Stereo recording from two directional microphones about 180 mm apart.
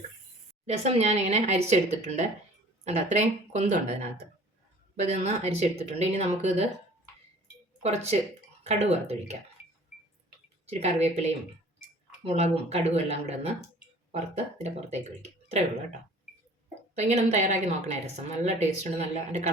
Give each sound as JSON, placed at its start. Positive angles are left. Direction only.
{"t": 0.6, "sound": "a woman's voice", "side_deg": -35}
{"t": 5.0, "sound": "a woman's voice", "side_deg": -35}
{"t": 7.8, "sound": "a woman's voice", "side_deg": -35}
{"t": 10.7, "sound": "a woman's voice", "side_deg": -35}
{"t": 16.9, "sound": "a woman's voice", "side_deg": -40}